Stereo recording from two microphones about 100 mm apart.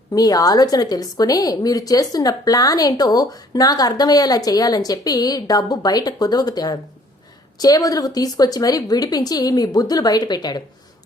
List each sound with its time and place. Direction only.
0.1 s a woman's voice: 40° left (ahead or behind)